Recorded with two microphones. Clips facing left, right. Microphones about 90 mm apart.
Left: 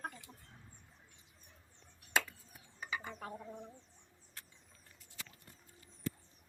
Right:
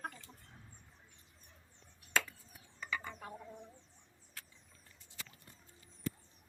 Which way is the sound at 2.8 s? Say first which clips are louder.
Right 1 dB; 10° left (ahead or behind).